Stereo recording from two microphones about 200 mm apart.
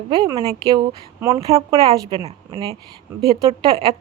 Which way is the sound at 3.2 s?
30° right (ahead or behind).